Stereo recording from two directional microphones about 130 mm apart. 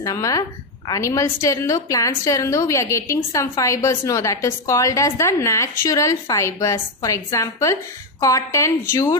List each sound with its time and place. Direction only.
0.0 s a woman's voice: 25° left (ahead or behind)